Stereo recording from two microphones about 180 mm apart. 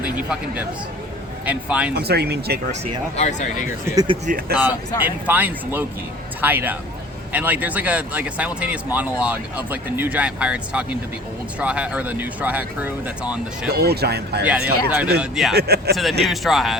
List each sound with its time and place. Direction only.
1.5 s speech: 5° right (ahead or behind)
1.9 s speech: 65° right (ahead or behind)
3.2 s speech: 40° left (ahead or behind)
3.8 s speech: 25° right (ahead or behind)
5.0 s speech: 10° right (ahead or behind)
13.7 s speech: 60° right (ahead or behind)
14.4 s speech: 5° right (ahead or behind)
15.5 s speech: 65° right (ahead or behind)
16.2 s speech: centre (ahead or behind)